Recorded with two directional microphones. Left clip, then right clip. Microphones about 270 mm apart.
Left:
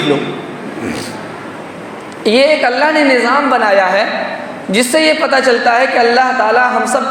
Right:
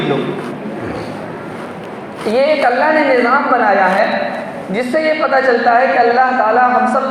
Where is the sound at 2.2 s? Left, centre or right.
Left.